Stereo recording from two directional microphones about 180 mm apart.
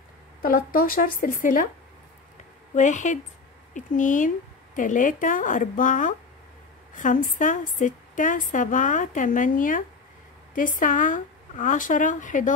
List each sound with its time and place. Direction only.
0.4 s a woman's voice: 50° left (ahead or behind)
2.7 s a woman's voice: 40° left (ahead or behind)